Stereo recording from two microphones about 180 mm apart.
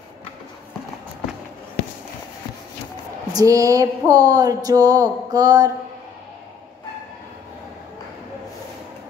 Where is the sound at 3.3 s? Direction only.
20° right (ahead or behind).